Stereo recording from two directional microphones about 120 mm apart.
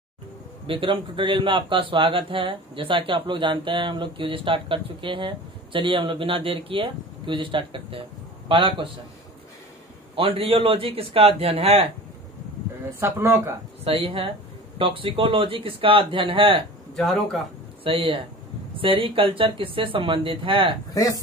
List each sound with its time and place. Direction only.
0.7 s speech: 45° right (ahead or behind)
10.1 s speech: 50° right (ahead or behind)
13.0 s speech: 20° right (ahead or behind)
13.8 s speech: 50° right (ahead or behind)
16.9 s speech: centre (ahead or behind)
17.8 s speech: 50° right (ahead or behind)
20.9 s speech: 30° left (ahead or behind)